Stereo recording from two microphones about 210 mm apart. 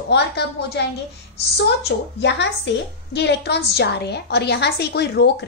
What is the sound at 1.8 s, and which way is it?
A woman's voice, 55° left (ahead or behind).